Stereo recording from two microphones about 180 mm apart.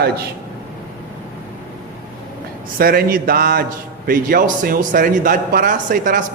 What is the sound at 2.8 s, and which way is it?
A man's voice, 55° right (ahead or behind).